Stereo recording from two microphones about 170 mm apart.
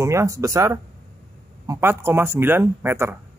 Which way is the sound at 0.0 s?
15° right (ahead or behind).